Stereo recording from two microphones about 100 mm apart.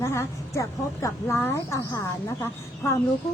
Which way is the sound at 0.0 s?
25° left (ahead or behind).